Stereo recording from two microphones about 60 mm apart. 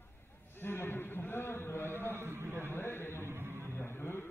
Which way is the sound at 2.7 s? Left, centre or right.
Left.